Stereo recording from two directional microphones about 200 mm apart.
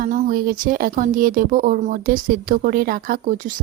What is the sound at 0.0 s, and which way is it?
Speech, 40° right (ahead or behind).